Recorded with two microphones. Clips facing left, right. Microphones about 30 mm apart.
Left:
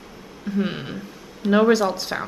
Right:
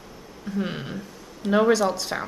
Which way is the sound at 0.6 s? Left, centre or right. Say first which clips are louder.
Left 3 dB; centre.